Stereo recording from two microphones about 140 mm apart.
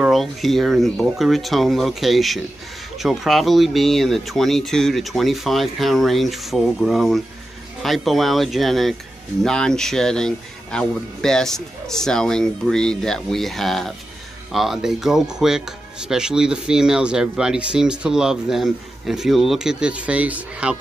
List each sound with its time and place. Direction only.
0.0 s speech: centre (ahead or behind)